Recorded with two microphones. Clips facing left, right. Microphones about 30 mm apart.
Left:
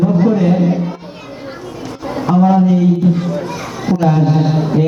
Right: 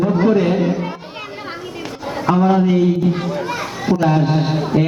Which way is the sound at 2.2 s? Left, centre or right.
Right.